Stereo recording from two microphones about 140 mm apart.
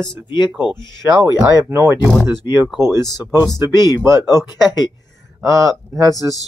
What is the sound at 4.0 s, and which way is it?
Speech, 20° right (ahead or behind).